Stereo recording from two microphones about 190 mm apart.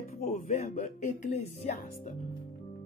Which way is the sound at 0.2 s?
40° left (ahead or behind).